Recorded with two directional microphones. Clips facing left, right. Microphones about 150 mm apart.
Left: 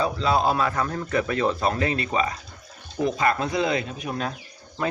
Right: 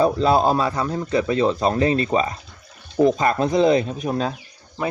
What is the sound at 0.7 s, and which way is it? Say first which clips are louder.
Speech: right 3 dB; 15° right (ahead or behind).